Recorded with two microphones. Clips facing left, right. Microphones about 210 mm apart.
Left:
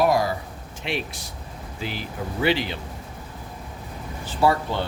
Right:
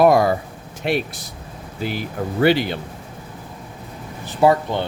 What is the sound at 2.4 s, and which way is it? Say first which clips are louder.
Speech: right 6 dB; 50° right (ahead or behind).